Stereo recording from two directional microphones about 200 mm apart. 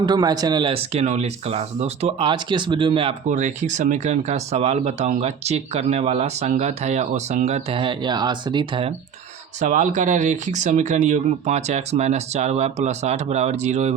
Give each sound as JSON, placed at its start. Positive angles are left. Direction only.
{"t": 0.0, "sound": "speech", "side_deg": -20}
{"t": 9.6, "sound": "speech", "side_deg": -40}